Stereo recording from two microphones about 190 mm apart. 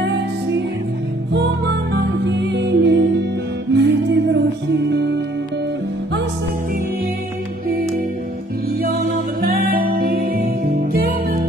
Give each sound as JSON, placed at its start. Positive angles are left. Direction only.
{"t": 0.0, "sound": "music", "side_deg": -65}
{"t": 2.2, "sound": "music", "side_deg": -65}
{"t": 9.4, "sound": "music", "side_deg": -50}